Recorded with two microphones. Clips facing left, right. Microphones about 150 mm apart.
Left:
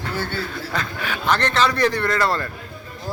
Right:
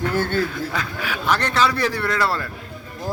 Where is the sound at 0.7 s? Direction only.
5° right (ahead or behind).